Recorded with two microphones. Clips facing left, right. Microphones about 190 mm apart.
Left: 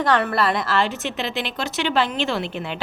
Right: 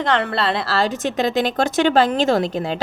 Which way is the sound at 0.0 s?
25° right (ahead or behind).